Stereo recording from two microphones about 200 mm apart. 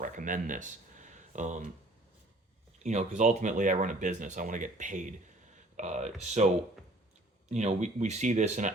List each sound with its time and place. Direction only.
0.0 s speech: 40° right (ahead or behind)
2.7 s speech: 35° right (ahead or behind)
7.5 s speech: 35° right (ahead or behind)